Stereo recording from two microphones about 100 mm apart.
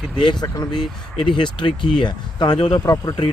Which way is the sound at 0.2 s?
50° left (ahead or behind).